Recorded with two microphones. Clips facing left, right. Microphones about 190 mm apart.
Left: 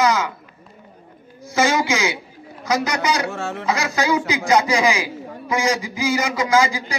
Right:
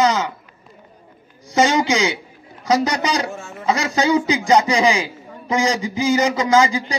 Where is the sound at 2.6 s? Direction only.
35° right (ahead or behind).